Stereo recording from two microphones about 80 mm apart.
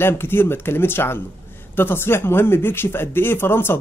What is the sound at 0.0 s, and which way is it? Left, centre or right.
Speech, left.